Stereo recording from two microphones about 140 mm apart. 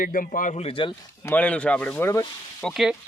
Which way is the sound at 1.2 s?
10° left (ahead or behind).